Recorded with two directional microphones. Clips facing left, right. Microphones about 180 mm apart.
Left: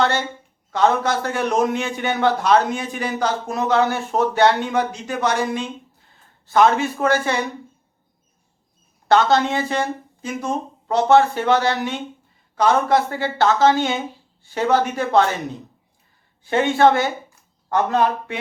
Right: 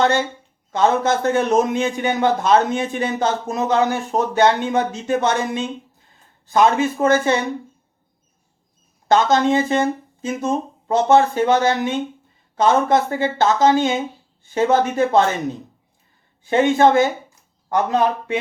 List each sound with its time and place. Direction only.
0.7 s a man's voice: 20° right (ahead or behind)
9.0 s a man's voice: 20° right (ahead or behind)
16.4 s a woman's voice: 15° right (ahead or behind)